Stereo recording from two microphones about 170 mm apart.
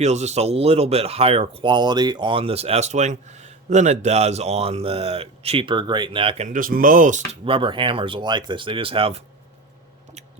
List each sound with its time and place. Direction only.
0.0 s speech: 40° right (ahead or behind)
6.6 s speech: 55° right (ahead or behind)
7.4 s speech: 30° right (ahead or behind)